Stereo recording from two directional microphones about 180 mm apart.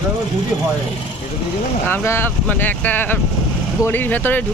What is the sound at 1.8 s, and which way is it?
Speech, 10° left (ahead or behind).